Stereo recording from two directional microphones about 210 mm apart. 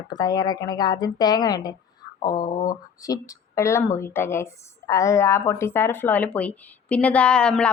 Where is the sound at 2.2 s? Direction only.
20° left (ahead or behind).